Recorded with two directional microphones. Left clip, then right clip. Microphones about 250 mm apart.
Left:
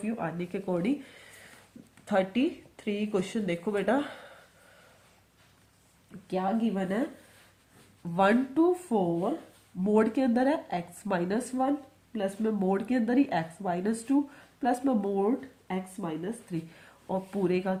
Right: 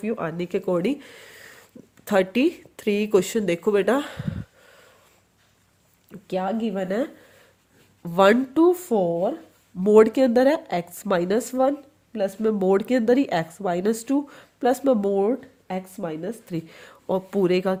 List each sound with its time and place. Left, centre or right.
0.0 s speech: right
6.2 s speech: right